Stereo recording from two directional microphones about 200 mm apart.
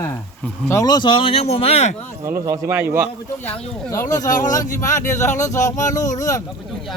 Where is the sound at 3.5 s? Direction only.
15° left (ahead or behind).